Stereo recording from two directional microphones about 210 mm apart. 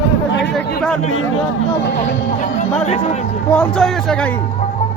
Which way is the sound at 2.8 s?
30° left (ahead or behind).